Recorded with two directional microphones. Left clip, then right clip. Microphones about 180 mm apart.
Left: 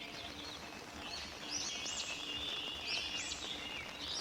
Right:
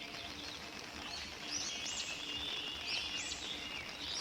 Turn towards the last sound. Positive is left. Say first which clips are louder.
# even
turn(degrees=0)  # may be behind; listen again after turning